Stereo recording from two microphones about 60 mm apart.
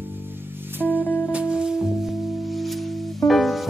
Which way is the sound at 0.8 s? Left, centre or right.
Left.